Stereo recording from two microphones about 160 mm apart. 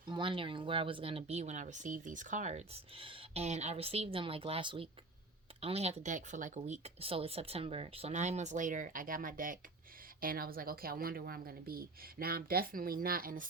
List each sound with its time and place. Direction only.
0.1 s speech: 30° right (ahead or behind); by 13.5 s 60° right (ahead or behind)